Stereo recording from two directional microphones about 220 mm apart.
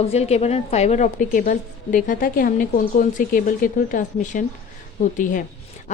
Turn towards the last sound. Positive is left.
turn(degrees=35)  # may be behind; listen again after turning